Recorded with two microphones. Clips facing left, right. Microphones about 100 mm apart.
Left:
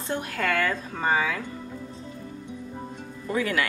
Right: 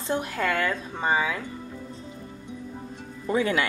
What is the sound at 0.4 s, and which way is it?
Speech, 10° right (ahead or behind).